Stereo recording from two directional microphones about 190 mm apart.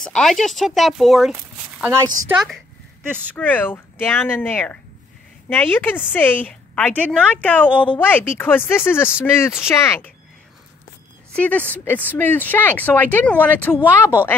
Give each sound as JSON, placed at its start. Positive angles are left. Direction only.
{"t": 0.0, "sound": "speech", "side_deg": 0}
{"t": 1.3, "sound": "a sound", "side_deg": -10}
{"t": 2.0, "sound": "a woman's voice", "side_deg": -20}
{"t": 2.3, "sound": "speech", "side_deg": 0}
{"t": 11.3, "sound": "speech", "side_deg": 10}